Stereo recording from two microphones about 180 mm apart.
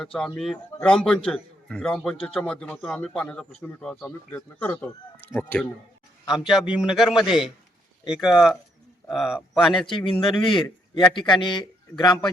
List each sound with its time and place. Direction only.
0.0 s a man's voice: 5° left (ahead or behind)
10.0 s a man's voice: 30° left (ahead or behind)